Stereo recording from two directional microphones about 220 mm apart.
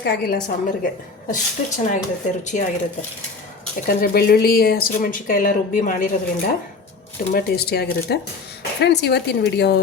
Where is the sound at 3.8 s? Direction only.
45° left (ahead or behind).